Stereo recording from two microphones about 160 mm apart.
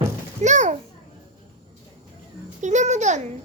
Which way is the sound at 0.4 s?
50° right (ahead or behind).